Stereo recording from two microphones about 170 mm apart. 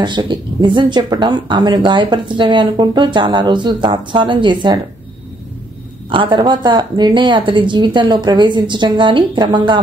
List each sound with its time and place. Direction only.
0.0 s speech: 25° right (ahead or behind)
6.0 s speech: 30° right (ahead or behind)